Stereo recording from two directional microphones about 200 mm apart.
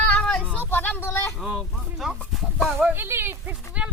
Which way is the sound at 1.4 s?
Centre (ahead or behind).